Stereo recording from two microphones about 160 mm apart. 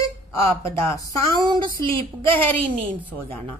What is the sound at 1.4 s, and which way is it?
Speech, 30° right (ahead or behind).